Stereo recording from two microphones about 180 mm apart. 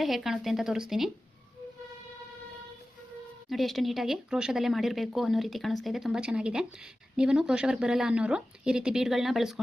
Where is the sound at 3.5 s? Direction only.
Centre (ahead or behind).